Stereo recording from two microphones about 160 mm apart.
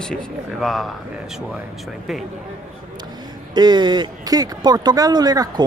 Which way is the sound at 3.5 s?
25° right (ahead or behind).